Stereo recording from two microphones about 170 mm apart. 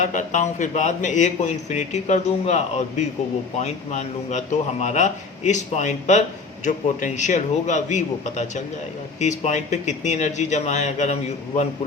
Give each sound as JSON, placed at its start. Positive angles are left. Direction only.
{"t": 0.0, "sound": "a man's voice", "side_deg": 45}